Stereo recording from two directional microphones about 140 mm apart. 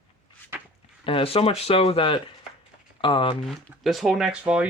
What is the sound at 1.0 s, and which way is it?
Speech, 40° left (ahead or behind).